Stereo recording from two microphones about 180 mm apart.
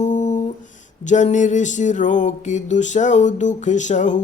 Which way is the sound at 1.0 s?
40° left (ahead or behind).